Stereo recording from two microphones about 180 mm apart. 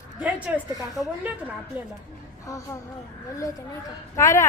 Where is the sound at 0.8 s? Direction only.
20° left (ahead or behind).